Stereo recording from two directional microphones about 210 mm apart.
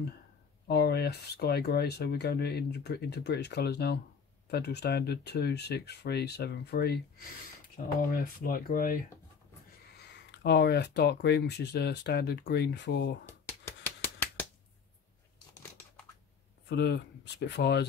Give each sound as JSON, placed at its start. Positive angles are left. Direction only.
{"t": 0.7, "sound": "speech", "side_deg": 50}
{"t": 8.0, "sound": "speech", "side_deg": 45}
{"t": 10.3, "sound": "speech", "side_deg": 50}
{"t": 16.6, "sound": "speech", "side_deg": 55}